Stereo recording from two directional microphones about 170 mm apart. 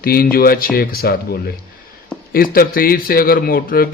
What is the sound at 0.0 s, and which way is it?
A man's voice, 60° left (ahead or behind).